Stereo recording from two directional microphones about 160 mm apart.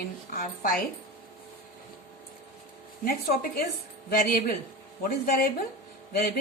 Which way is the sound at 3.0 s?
65° left (ahead or behind).